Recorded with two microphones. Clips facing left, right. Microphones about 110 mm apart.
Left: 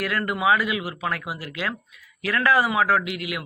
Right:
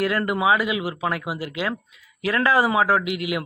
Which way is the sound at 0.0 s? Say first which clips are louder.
Right 2 dB; 25° right (ahead or behind).